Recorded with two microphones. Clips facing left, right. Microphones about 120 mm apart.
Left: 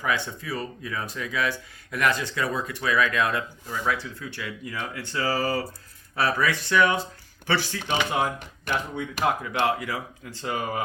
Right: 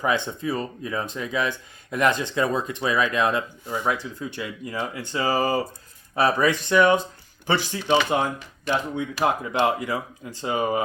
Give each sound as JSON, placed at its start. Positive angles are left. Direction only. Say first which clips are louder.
{"t": 0.0, "sound": "speech", "louder": "right 4 dB", "side_deg": -25}
{"t": 9.0, "sound": "speech", "louder": "right 2 dB", "side_deg": -20}